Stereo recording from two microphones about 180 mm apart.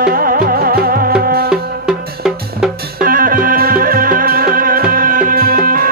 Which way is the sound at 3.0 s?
50° right (ahead or behind).